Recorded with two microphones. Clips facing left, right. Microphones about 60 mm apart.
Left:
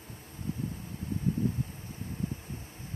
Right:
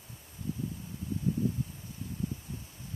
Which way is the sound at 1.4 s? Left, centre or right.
Left.